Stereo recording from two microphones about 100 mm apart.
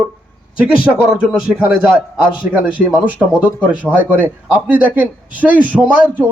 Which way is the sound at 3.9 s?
15° right (ahead or behind).